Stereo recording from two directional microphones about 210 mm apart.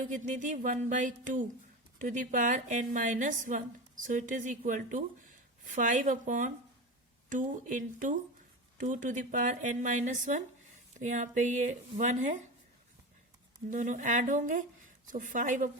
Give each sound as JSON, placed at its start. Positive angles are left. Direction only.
{"t": 0.0, "sound": "a woman's voice", "side_deg": -35}
{"t": 13.7, "sound": "a woman's voice", "side_deg": -35}